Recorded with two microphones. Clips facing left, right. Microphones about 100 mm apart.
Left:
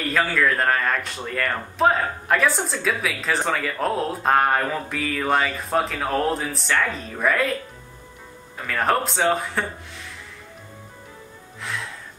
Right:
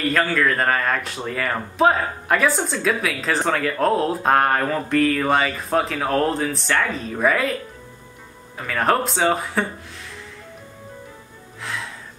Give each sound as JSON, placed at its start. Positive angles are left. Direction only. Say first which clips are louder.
{"t": 0.0, "sound": "speech", "louder": "right 2 dB", "side_deg": 0}
{"t": 8.5, "sound": "speech", "louder": "right 2 dB", "side_deg": 0}
{"t": 11.6, "sound": "music", "louder": "right 1 dB", "side_deg": 0}